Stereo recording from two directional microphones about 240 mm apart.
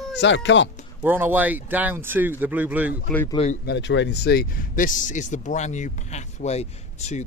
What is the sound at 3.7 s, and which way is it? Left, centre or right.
Speech, left.